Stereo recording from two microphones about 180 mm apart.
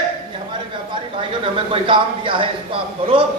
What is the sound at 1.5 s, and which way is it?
Speech, 30° right (ahead or behind).